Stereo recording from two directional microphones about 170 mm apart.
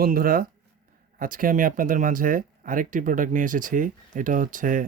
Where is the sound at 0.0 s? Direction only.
60° right (ahead or behind).